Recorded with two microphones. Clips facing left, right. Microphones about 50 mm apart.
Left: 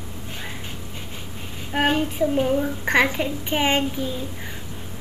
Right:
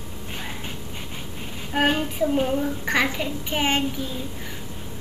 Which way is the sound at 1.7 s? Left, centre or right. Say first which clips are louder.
Left 1 dB; centre.